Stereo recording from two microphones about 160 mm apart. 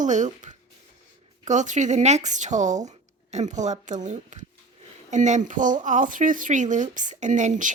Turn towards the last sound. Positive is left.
turn(degrees=-50)  # may be behind; listen again after turning